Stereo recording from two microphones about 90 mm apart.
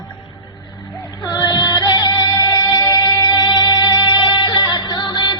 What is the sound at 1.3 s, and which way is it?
Music, 50° left (ahead or behind).